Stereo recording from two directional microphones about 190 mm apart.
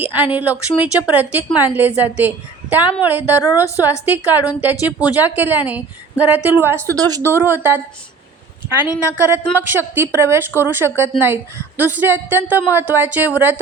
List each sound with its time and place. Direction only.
0.0 s a woman's voice: 10° right (ahead or behind)
9.0 s a woman's voice: 10° right (ahead or behind)